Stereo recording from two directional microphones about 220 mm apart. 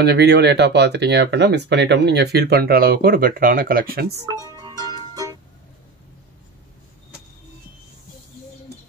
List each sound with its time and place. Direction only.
0.0 s speech: 50° right (ahead or behind)
4.3 s music: 15° right (ahead or behind)